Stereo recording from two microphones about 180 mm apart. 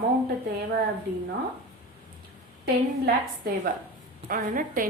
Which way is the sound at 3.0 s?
55° right (ahead or behind).